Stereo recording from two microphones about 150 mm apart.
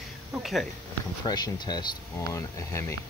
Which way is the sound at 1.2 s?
30° left (ahead or behind).